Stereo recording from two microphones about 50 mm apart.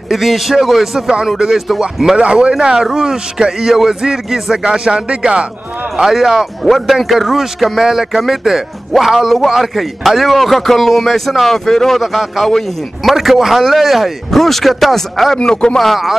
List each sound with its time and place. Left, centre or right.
0.1 s speech: centre
2.1 s a man's voice: right
6.2 s a man's voice: centre
6.7 s a man's voice: centre
12.4 s a man's voice: centre
13.1 s speech: centre
15.3 s a man's voice: centre
15.8 s speech: centre